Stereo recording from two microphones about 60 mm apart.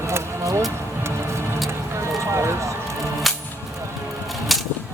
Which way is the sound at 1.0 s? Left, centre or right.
Right.